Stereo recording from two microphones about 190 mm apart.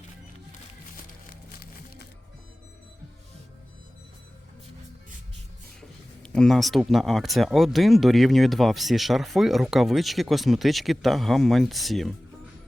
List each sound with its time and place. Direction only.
6.2 s speech: 5° left (ahead or behind)